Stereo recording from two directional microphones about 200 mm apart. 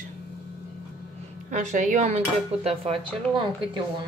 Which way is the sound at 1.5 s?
40° right (ahead or behind).